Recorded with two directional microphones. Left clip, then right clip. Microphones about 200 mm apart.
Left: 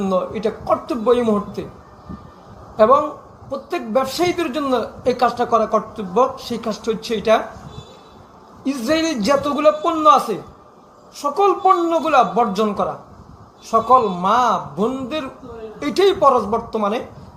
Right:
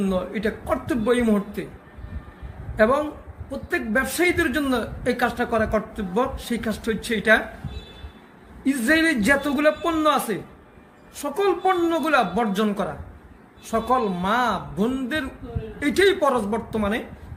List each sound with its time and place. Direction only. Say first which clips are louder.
0.1 s speech: left 5 dB; 20° right (ahead or behind)
2.7 s speech: left 6 dB; 20° right (ahead or behind)
8.6 s a man's voice: even; 15° right (ahead or behind)